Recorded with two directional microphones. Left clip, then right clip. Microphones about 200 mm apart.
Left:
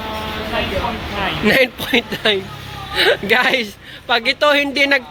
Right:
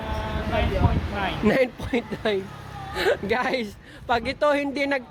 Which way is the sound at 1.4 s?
10° right (ahead or behind).